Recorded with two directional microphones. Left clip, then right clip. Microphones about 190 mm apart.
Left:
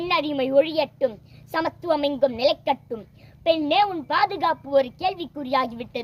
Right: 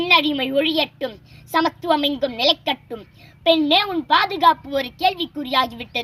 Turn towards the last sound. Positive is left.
turn(degrees=25)  # may be behind; listen again after turning